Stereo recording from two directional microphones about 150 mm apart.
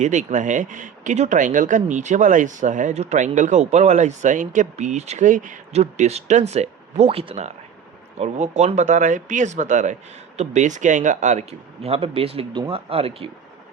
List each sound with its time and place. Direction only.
0.0 s speech: 55° right (ahead or behind)